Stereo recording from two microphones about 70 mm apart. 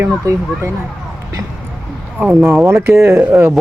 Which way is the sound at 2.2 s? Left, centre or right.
Right.